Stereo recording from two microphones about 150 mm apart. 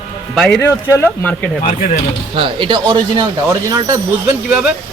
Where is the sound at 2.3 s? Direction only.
35° right (ahead or behind).